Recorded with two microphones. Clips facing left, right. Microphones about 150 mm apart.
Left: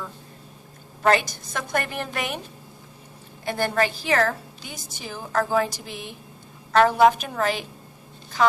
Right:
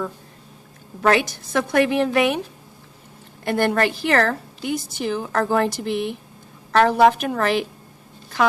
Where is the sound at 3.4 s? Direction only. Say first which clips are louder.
Right 4 dB; 60° right (ahead or behind).